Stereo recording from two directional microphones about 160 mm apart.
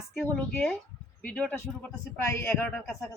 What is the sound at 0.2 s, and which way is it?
Speech, 15° left (ahead or behind).